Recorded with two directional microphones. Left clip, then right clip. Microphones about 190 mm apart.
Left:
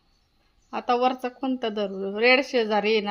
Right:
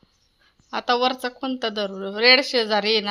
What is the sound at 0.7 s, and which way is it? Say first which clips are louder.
A woman's voice: right 2 dB; centre (ahead or behind).